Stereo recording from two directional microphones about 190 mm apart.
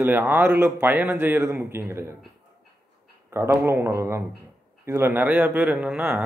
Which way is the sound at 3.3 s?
15° right (ahead or behind).